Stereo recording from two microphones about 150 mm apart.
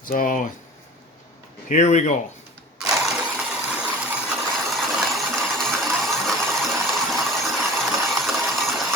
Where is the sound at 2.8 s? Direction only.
Centre (ahead or behind).